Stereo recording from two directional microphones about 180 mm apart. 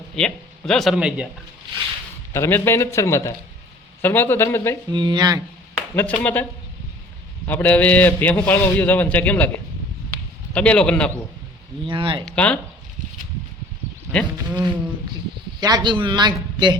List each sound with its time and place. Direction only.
0.2 s speech: 5° left (ahead or behind)
2.3 s a man's voice: 15° left (ahead or behind)
4.9 s a man's voice: 25° right (ahead or behind)
5.9 s a man's voice: 10° left (ahead or behind)
7.4 s a man's voice: 10° left (ahead or behind)
10.1 s a sound: 5° left (ahead or behind)
11.9 s a man's voice: 30° right (ahead or behind)
12.2 s a man's voice: 5° left (ahead or behind)
15.6 s a man's voice: 25° right (ahead or behind)